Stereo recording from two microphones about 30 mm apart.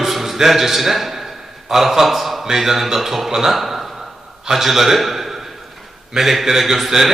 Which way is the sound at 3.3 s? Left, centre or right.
Centre.